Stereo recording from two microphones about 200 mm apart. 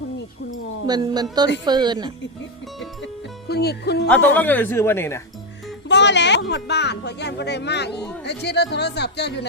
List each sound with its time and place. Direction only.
0.9 s speech: 20° right (ahead or behind)
3.5 s speech: 55° left (ahead or behind)
4.1 s speech: 10° left (ahead or behind)
5.9 s speech: 60° left (ahead or behind)